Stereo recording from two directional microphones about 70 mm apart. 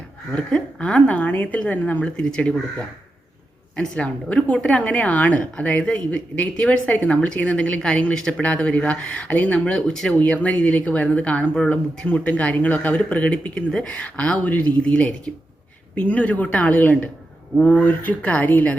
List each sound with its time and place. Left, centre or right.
0.3 s speech: centre
10.2 s speech: left